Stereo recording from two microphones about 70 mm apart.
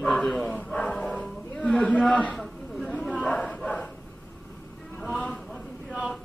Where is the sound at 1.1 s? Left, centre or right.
Centre.